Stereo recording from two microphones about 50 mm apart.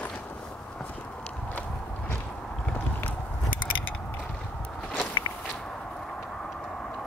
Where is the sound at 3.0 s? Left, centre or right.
Left.